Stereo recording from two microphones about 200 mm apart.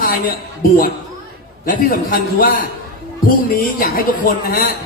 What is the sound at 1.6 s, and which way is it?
Speech, 45° left (ahead or behind).